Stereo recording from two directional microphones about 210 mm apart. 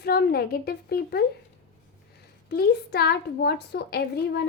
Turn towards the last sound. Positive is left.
turn(degrees=50)  # may be behind; listen again after turning